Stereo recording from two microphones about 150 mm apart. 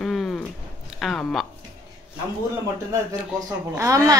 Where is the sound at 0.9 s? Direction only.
Centre (ahead or behind).